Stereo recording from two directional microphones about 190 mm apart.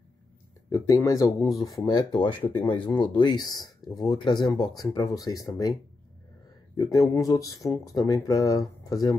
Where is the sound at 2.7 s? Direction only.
25° left (ahead or behind).